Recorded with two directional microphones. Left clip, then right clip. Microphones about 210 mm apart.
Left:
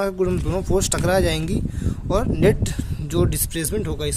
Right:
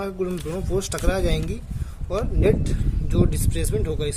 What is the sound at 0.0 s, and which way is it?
Speech, 45° left (ahead or behind).